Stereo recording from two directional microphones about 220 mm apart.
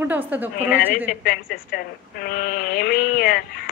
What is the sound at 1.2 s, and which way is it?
Speech, 45° left (ahead or behind).